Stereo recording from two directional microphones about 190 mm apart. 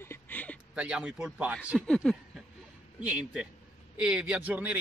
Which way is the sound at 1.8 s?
5° left (ahead or behind).